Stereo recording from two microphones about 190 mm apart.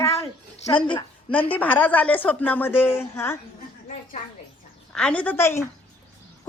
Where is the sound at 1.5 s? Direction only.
10° left (ahead or behind).